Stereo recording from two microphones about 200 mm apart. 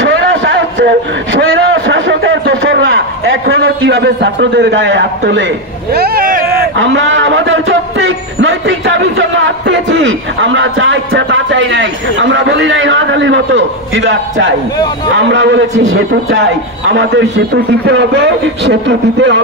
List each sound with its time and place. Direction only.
0.0 s a sound: 60° right (ahead or behind)
3.6 s a man's voice: 65° right (ahead or behind)
5.9 s speech: 50° right (ahead or behind)
6.5 s a man's voice: 55° right (ahead or behind)